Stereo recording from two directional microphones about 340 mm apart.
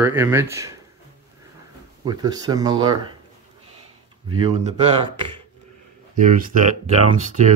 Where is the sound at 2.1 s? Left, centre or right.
Centre.